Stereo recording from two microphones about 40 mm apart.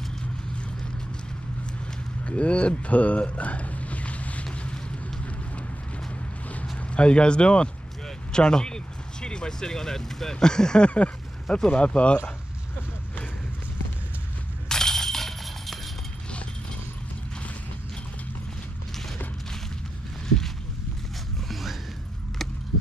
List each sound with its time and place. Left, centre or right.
2.2 s speech: left
6.8 s speech: left
14.7 s a sound: centre
20.2 s boat: centre
21.5 s music: centre